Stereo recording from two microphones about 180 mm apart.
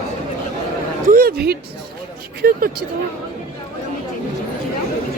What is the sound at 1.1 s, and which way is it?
Speech, 55° right (ahead or behind).